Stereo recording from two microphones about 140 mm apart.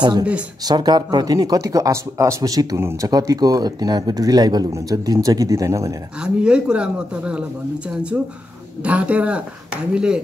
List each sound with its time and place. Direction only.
0.7 s speech: 30° right (ahead or behind)
6.2 s speech: 5° right (ahead or behind)
8.8 s speech: 10° right (ahead or behind)